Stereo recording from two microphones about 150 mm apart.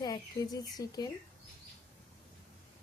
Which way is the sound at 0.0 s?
25° left (ahead or behind).